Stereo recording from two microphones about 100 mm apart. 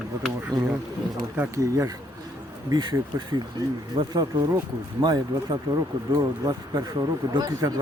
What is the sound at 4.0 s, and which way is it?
Speech, 45° right (ahead or behind).